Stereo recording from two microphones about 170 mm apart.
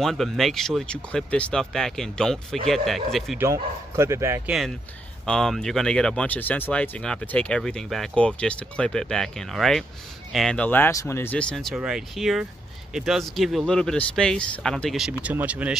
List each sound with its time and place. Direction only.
0.0 s speech: centre (ahead or behind)
3.3 s speech: 15° right (ahead or behind)
4.5 s speech: centre (ahead or behind)